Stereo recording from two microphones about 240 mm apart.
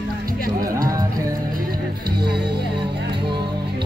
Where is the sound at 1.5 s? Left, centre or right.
Right.